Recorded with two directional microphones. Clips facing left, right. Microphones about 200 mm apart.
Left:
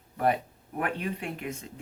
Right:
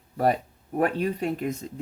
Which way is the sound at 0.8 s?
40° right (ahead or behind).